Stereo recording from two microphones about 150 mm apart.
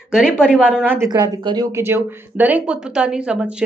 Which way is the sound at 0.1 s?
5° right (ahead or behind).